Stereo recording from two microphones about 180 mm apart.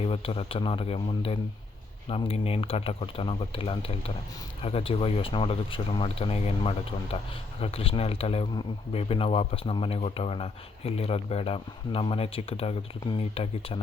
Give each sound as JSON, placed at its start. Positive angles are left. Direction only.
{"t": 0.0, "sound": "speech", "side_deg": 30}